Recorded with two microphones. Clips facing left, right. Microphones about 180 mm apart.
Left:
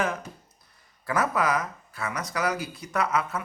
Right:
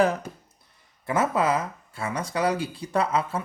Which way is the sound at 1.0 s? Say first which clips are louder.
Right 2 dB; 25° right (ahead or behind).